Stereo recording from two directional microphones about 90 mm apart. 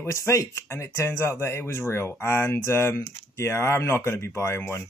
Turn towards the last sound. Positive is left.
turn(degrees=30)  # may be behind; listen again after turning